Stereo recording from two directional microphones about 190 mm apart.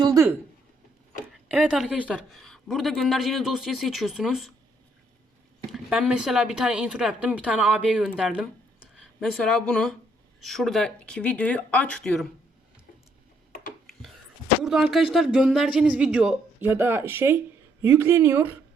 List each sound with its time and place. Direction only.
0.0 s a sound: 15° right (ahead or behind)
1.5 s a woman's voice: 5° right (ahead or behind)
5.7 s a woman's voice: 5° right (ahead or behind)
14.6 s a woman's voice: 5° right (ahead or behind)